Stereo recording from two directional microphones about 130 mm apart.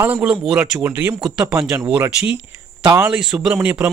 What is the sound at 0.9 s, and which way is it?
Speech, 15° right (ahead or behind).